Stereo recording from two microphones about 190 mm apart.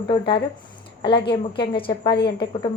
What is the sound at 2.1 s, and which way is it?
Speech, 55° left (ahead or behind).